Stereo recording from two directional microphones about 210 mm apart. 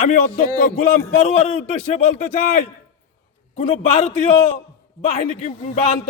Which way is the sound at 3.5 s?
30° left (ahead or behind).